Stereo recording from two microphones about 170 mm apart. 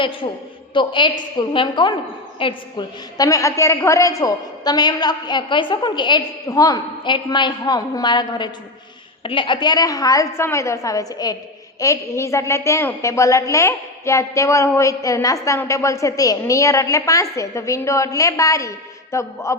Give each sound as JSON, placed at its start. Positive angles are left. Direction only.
{"t": 0.7, "sound": "a woman's voice", "side_deg": 30}